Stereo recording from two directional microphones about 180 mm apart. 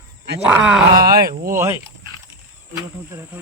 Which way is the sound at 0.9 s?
55° right (ahead or behind).